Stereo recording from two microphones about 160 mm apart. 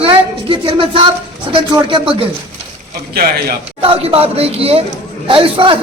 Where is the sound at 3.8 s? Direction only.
35° right (ahead or behind).